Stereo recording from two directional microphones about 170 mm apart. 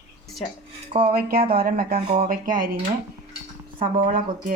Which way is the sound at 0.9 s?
35° right (ahead or behind).